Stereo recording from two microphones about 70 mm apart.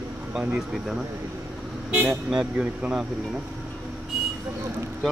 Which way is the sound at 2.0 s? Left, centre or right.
Centre.